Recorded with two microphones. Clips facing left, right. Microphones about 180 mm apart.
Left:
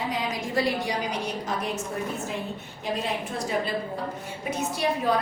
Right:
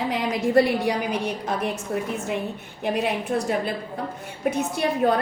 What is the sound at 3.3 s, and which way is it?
A woman's voice, 55° right (ahead or behind).